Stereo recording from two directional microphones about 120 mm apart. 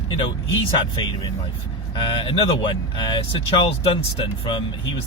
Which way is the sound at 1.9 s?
45° left (ahead or behind).